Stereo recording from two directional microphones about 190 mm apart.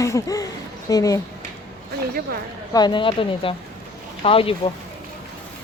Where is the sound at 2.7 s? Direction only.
25° left (ahead or behind).